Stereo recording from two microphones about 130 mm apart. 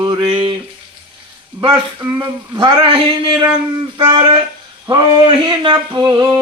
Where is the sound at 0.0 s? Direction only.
40° right (ahead or behind).